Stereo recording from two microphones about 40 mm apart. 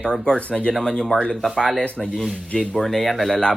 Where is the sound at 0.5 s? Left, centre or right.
Left.